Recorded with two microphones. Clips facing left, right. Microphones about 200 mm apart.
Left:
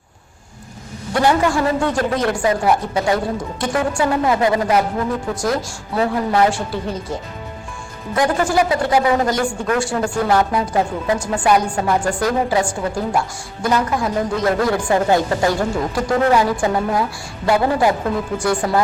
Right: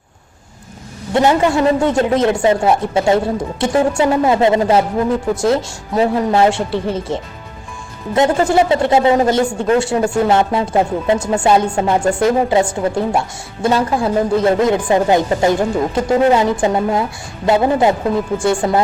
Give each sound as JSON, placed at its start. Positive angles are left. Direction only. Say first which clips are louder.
{"t": 1.1, "sound": "speech", "louder": "right 3 dB", "side_deg": -20}